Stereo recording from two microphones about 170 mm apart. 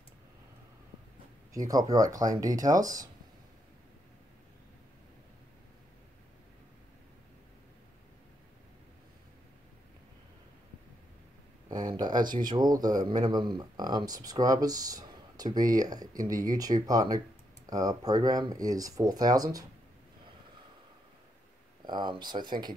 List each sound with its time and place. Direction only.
1.5 s speech: 20° right (ahead or behind)
11.7 s a sound: 25° right (ahead or behind)
12.4 s speech: 25° right (ahead or behind)
21.8 s speech: 25° right (ahead or behind)